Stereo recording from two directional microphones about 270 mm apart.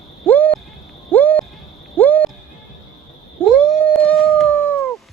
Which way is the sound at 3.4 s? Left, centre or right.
Centre.